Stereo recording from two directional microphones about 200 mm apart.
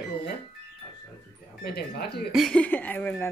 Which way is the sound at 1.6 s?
50° left (ahead or behind).